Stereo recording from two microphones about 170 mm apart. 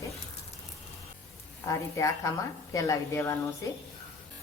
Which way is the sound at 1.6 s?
20° left (ahead or behind).